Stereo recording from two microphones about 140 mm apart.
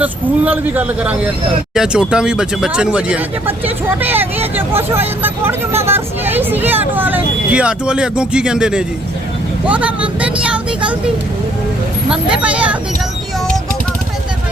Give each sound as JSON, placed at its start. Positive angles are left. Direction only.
{"t": 0.0, "sound": "speech", "side_deg": -10}
{"t": 12.0, "sound": "speech", "side_deg": -5}